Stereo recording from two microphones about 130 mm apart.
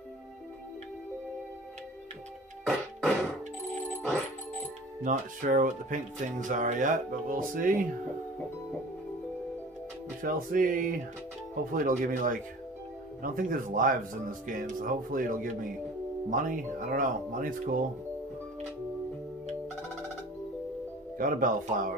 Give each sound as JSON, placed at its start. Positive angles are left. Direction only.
{"t": 2.6, "sound": "music", "side_deg": 5}
{"t": 5.0, "sound": "speech", "side_deg": -80}
{"t": 6.4, "sound": "speech", "side_deg": -75}
{"t": 10.2, "sound": "speech", "side_deg": -90}
{"t": 21.2, "sound": "speech", "side_deg": -90}